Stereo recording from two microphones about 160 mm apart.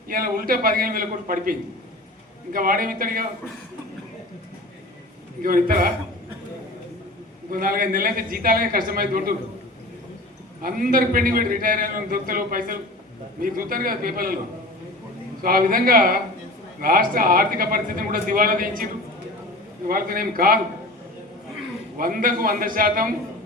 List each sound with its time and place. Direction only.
0.1 s a man's voice: 65° right (ahead or behind)
5.4 s a man's voice: 60° right (ahead or behind)
7.5 s a man's voice: 60° right (ahead or behind)
10.6 s a man's voice: 65° right (ahead or behind)
15.4 s a man's voice: 65° right (ahead or behind)
19.9 s a man's voice: 65° right (ahead or behind)
21.9 s a man's voice: 60° right (ahead or behind)